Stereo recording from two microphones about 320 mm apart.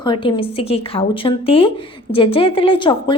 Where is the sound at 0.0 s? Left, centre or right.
Centre.